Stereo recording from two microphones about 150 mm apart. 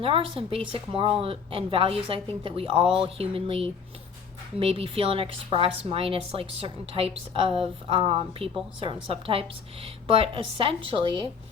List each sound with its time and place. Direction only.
0.0 s a woman's voice: 40° right (ahead or behind)